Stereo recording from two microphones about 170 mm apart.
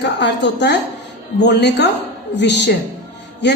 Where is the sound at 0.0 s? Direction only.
90° left.